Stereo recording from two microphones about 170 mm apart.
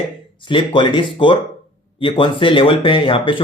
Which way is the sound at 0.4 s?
30° left (ahead or behind).